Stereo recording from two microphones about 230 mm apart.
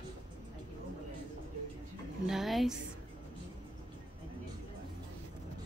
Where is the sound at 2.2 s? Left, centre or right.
Centre.